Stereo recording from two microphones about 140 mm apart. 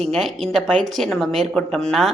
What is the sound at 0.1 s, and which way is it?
Speech, centre (ahead or behind).